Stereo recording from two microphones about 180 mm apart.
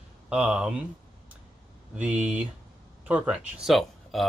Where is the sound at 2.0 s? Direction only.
5° right (ahead or behind).